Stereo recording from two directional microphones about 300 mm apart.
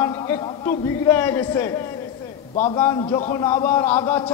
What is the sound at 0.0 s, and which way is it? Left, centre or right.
A man's voice, centre.